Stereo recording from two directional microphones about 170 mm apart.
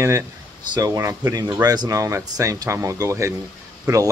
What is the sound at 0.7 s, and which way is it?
Speech, 20° right (ahead or behind).